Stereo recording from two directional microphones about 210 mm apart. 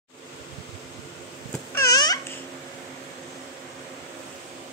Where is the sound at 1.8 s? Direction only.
15° left (ahead or behind).